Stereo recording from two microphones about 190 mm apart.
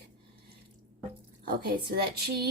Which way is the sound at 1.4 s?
55° right (ahead or behind).